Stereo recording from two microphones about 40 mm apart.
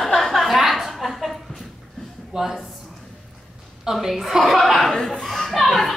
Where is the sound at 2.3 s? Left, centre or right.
Centre.